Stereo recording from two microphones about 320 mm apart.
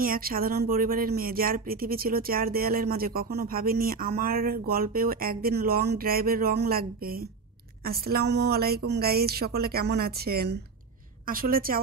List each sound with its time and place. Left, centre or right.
0.0 s speech: right